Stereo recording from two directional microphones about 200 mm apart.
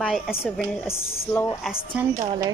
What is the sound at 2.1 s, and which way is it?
Speech, 15° right (ahead or behind).